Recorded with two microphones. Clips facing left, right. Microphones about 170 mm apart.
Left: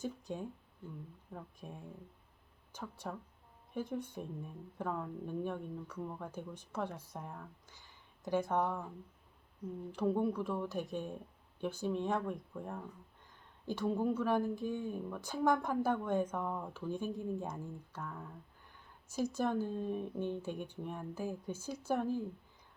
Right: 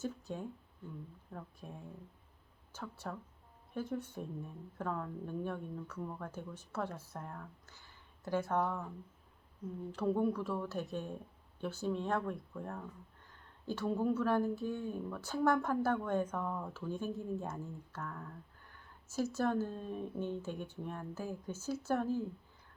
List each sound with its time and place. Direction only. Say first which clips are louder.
0.0 s speech: even; 15° left (ahead or behind)
2.7 s speech: even; 10° left (ahead or behind)
9.9 s speech: even; 10° left (ahead or behind)